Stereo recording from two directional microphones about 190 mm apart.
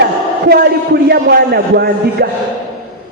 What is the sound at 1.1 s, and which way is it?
A man's voice, 55° right (ahead or behind).